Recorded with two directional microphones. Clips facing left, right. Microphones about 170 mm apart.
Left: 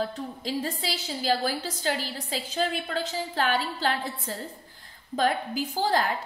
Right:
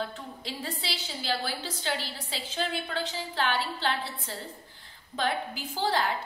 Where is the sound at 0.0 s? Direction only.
40° left (ahead or behind).